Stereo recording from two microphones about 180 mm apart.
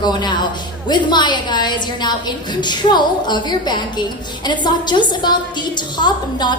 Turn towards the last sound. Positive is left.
turn(degrees=25)  # may be behind; listen again after turning